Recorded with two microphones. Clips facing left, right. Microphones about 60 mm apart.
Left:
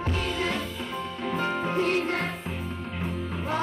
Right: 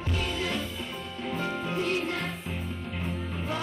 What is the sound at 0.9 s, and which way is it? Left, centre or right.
Music, left.